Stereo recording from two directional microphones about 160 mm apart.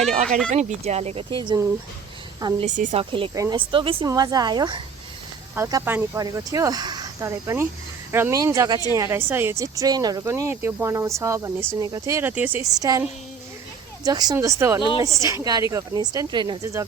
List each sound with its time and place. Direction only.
0.3 s speech: 5° left (ahead or behind)
0.5 s speech: 45° right (ahead or behind); by 1.6 s 30° right (ahead or behind)
2.6 s speech: 50° right (ahead or behind)
3.0 s speech: 35° right (ahead or behind)
5.8 s speech: 15° right (ahead or behind)
12.6 s speech: 20° right (ahead or behind)
14.8 s speech: 30° left (ahead or behind)
15.0 s speech: 20° right (ahead or behind)